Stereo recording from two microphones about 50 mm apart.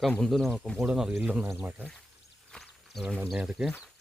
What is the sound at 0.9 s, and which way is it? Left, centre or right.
Speech, centre.